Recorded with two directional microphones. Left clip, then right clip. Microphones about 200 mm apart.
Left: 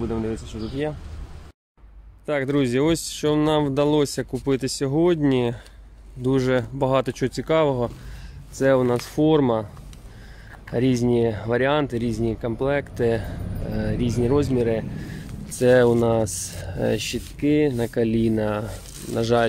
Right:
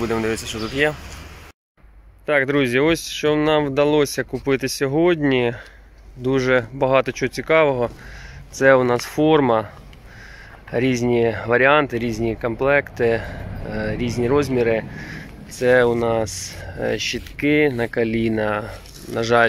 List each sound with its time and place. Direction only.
0.0 s speech: centre (ahead or behind)
2.2 s speech: 15° left (ahead or behind)
10.7 s speech: 15° left (ahead or behind)
15.6 s speech: 25° left (ahead or behind)
17.4 s speech: 10° left (ahead or behind)